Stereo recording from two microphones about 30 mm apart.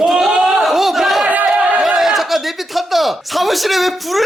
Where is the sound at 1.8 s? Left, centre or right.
Centre.